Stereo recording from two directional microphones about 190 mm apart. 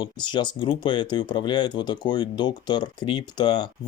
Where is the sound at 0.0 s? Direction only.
25° left (ahead or behind).